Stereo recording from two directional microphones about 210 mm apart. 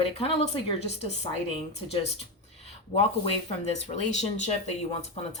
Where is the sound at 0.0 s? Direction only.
30° left (ahead or behind).